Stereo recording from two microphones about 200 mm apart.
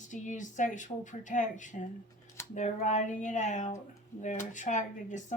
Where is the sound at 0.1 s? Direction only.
40° left (ahead or behind).